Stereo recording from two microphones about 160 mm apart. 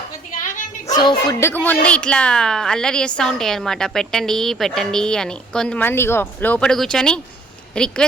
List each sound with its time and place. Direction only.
0.3 s bow-wow: 55° left (ahead or behind)
0.9 s a sound: 25° left (ahead or behind)
1.3 s a woman's voice: 15° left (ahead or behind)